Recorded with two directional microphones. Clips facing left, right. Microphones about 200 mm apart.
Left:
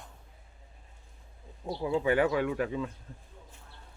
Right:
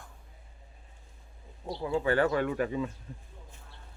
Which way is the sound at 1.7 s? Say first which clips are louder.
Left 1 dB; 10° left (ahead or behind).